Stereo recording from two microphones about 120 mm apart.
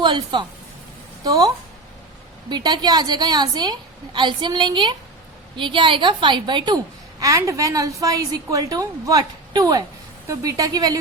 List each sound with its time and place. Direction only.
0.0 s a woman's voice: 40° right (ahead or behind)